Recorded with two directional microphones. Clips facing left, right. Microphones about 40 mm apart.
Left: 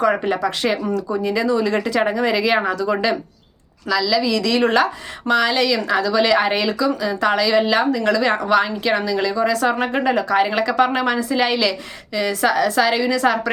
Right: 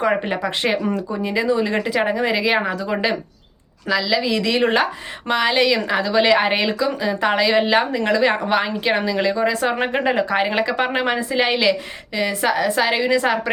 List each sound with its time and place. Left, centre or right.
0.0 s a woman's voice: right